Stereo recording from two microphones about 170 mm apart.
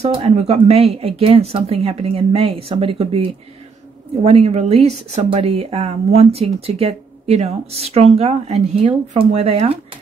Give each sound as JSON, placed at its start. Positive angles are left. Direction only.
{"t": 0.0, "sound": "speech", "side_deg": -35}
{"t": 4.2, "sound": "speech", "side_deg": -35}